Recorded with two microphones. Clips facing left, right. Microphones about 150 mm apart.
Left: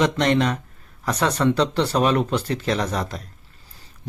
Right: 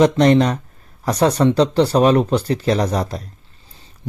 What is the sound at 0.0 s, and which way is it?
Speech, 35° right (ahead or behind).